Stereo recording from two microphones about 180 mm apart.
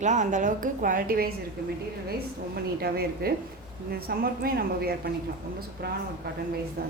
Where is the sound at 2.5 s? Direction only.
60° right (ahead or behind).